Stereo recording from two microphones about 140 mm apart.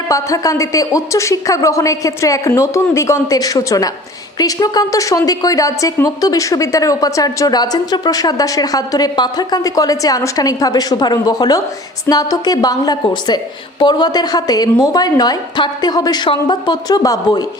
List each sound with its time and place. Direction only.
0.1 s a woman's voice: 20° left (ahead or behind)